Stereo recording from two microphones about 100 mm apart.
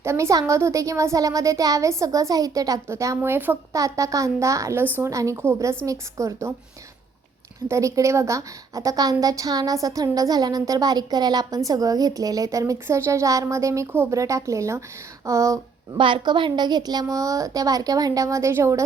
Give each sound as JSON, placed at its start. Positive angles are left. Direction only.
{"t": 0.0, "sound": "speech", "side_deg": -30}
{"t": 3.7, "sound": "speech", "side_deg": -35}
{"t": 4.8, "sound": "speech", "side_deg": -20}
{"t": 5.1, "sound": "speech", "side_deg": -30}
{"t": 7.7, "sound": "speech", "side_deg": -30}
{"t": 16.0, "sound": "speech", "side_deg": -55}